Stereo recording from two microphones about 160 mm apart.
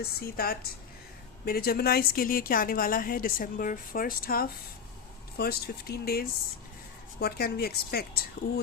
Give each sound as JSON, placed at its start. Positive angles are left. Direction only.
{"t": 0.0, "sound": "a woman's voice", "side_deg": 65}